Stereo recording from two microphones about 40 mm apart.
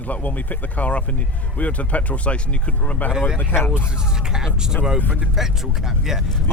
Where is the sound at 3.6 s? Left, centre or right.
Left.